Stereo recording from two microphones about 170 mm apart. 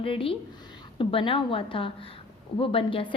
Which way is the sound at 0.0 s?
30° left (ahead or behind).